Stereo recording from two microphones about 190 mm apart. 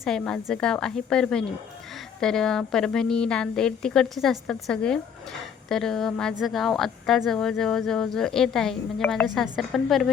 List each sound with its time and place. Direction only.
0.0 s speech: centre (ahead or behind)